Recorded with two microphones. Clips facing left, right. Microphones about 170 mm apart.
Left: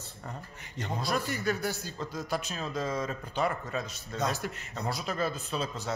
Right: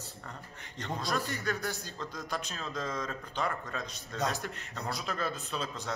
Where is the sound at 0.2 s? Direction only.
10° left (ahead or behind).